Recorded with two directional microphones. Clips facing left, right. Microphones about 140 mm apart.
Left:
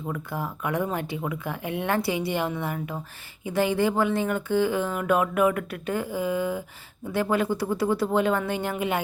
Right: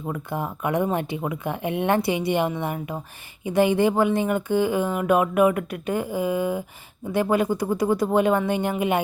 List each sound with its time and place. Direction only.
0.1 s speech: 20° right (ahead or behind)